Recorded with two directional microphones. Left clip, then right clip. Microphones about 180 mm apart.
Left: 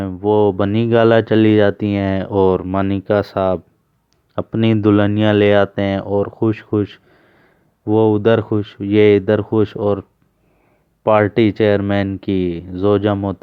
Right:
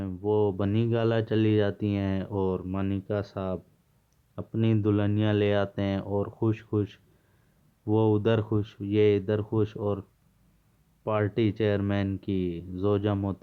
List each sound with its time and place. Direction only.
0.0 s speech: 35° left (ahead or behind)